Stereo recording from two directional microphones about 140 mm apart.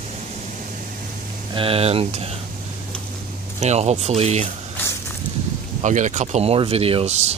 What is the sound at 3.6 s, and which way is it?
Speech, 50° right (ahead or behind).